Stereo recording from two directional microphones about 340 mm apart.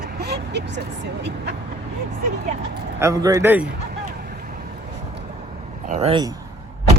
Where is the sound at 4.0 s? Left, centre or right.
Right.